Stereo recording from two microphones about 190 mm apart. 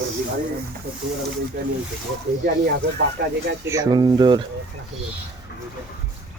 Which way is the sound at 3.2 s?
55° right (ahead or behind).